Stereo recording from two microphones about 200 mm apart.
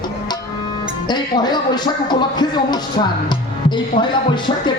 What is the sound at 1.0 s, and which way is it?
Speech, 20° left (ahead or behind).